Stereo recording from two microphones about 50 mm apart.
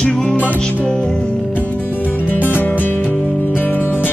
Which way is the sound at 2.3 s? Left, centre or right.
Left.